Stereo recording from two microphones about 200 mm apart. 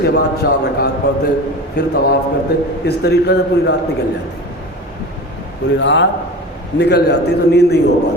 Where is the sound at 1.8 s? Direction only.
50° left (ahead or behind).